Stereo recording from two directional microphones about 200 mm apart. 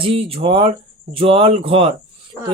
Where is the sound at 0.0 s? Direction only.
30° right (ahead or behind).